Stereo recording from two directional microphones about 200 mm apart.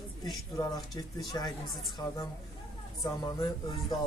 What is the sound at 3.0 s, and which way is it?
Speech, 20° left (ahead or behind).